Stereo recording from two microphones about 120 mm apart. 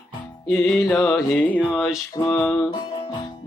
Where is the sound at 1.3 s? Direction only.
15° left (ahead or behind).